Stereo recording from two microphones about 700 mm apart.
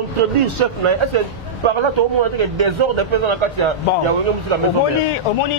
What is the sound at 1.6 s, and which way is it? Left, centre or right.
A man's voice, right.